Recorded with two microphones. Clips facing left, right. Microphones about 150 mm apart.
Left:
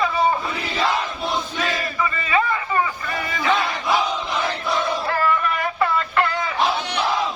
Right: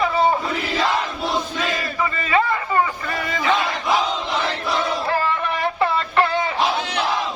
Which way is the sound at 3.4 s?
10° right (ahead or behind).